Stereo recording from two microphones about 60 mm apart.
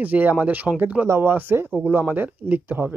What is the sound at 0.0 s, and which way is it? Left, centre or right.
Speech, right.